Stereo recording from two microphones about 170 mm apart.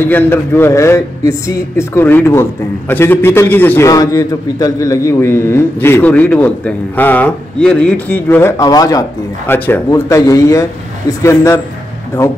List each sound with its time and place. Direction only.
0.1 s a man's voice: 15° left (ahead or behind)